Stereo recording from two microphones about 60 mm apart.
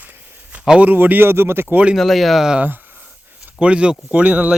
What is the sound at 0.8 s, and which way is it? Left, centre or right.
Speech, right.